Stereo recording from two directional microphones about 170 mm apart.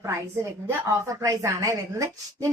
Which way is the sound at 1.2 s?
20° right (ahead or behind).